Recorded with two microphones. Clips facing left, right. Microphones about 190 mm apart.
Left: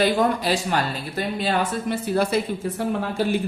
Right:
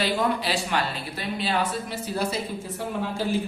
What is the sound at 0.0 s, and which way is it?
Speech, 45° left (ahead or behind).